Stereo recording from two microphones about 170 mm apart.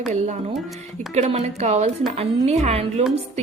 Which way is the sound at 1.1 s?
40° right (ahead or behind).